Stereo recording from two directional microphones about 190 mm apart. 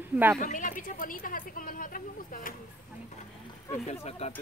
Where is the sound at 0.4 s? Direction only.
45° left (ahead or behind).